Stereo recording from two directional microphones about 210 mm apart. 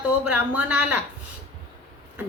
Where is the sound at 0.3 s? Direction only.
5° right (ahead or behind).